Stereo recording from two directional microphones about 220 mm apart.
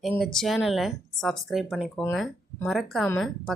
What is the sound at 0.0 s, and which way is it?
Speech, centre (ahead or behind).